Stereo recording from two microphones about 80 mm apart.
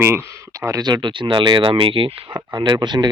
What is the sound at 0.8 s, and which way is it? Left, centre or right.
Speech, right.